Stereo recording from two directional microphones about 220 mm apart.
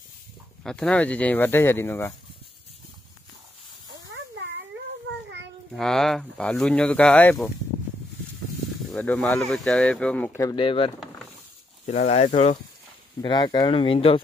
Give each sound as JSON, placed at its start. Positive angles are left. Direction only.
{"t": 0.7, "sound": "speech", "side_deg": 5}
{"t": 5.8, "sound": "speech", "side_deg": 0}
{"t": 8.9, "sound": "speech", "side_deg": 5}
{"t": 13.2, "sound": "speech", "side_deg": 20}